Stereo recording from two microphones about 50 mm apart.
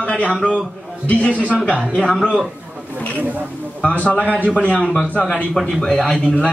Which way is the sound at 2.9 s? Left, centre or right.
Left.